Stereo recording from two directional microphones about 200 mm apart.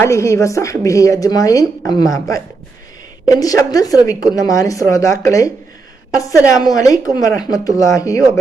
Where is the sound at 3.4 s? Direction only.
20° left (ahead or behind).